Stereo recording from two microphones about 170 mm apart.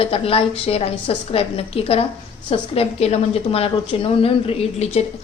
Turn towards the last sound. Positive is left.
turn(degrees=40)  # may be behind; listen again after turning